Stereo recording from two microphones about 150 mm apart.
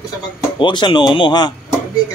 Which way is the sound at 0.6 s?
30° left (ahead or behind).